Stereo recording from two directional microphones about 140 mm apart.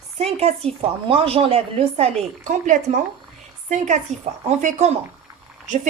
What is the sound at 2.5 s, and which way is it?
Speech, 60° right (ahead or behind).